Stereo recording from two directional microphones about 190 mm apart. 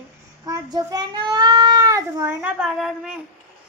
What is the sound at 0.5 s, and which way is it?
A child's voice, 20° right (ahead or behind).